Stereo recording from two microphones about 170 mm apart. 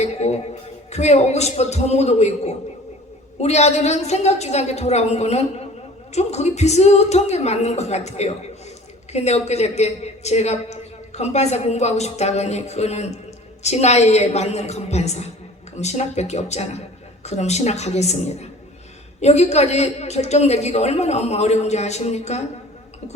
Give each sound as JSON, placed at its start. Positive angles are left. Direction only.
{"t": 0.0, "sound": "music", "side_deg": 40}
{"t": 0.9, "sound": "a woman's voice", "side_deg": 40}